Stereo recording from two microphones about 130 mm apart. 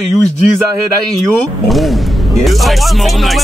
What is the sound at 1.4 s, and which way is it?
Speech, centre (ahead or behind).